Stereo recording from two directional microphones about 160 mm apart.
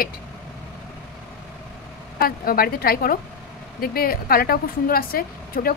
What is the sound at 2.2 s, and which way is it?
A woman's voice, 65° left (ahead or behind).